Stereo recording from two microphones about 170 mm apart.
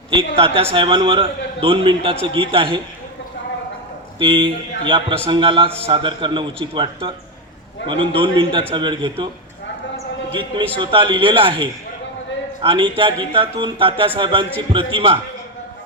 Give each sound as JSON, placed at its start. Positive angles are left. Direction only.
{"t": 0.1, "sound": "a man's voice", "side_deg": -35}
{"t": 4.2, "sound": "a man's voice", "side_deg": -30}
{"t": 10.8, "sound": "a man's voice", "side_deg": -30}